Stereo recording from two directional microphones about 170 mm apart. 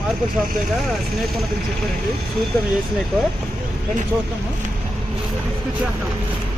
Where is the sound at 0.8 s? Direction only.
Centre (ahead or behind).